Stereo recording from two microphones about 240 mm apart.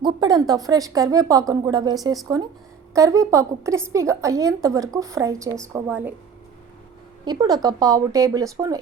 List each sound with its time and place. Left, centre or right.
0.0 s a woman's voice: centre
7.3 s a woman's voice: centre